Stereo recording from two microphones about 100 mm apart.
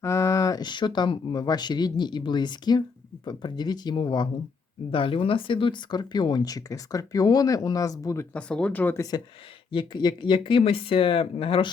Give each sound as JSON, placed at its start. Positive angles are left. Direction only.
{"t": 0.0, "sound": "speech", "side_deg": 30}
{"t": 4.9, "sound": "speech", "side_deg": 60}
{"t": 8.3, "sound": "speech", "side_deg": 10}
{"t": 9.0, "sound": "speech", "side_deg": 40}
{"t": 10.6, "sound": "speech", "side_deg": 70}